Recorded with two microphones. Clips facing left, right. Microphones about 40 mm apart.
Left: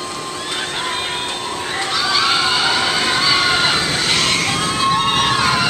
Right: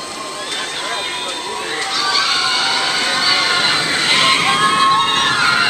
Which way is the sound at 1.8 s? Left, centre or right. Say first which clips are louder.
Even; centre.